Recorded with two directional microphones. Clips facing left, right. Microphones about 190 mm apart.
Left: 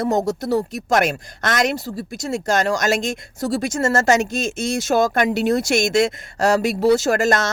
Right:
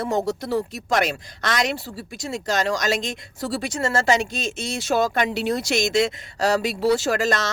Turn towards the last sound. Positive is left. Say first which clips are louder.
# left 4 dB
turn(degrees=50)  # may be behind; listen again after turning